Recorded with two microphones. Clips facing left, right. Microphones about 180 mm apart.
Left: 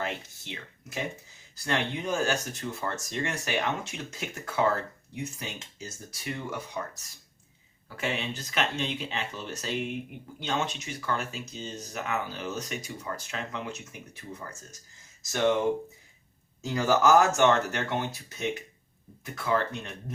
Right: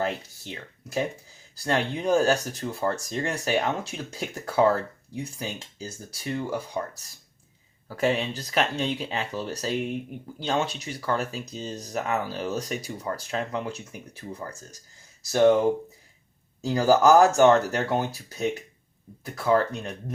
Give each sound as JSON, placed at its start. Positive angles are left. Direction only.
{"t": 0.0, "sound": "speech", "side_deg": -35}
{"t": 7.9, "sound": "speech", "side_deg": -40}
{"t": 16.6, "sound": "speech", "side_deg": -35}